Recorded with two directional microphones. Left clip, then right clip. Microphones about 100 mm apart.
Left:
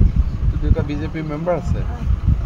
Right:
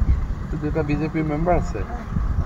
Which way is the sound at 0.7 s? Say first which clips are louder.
Right 3 dB; 30° left (ahead or behind).